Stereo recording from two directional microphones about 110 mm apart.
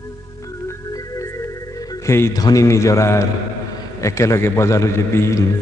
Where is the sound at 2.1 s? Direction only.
30° left (ahead or behind).